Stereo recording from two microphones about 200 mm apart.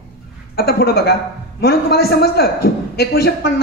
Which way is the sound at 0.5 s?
50° left (ahead or behind).